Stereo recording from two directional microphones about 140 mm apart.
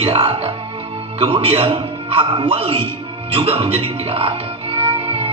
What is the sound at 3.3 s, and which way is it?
Music, 40° right (ahead or behind).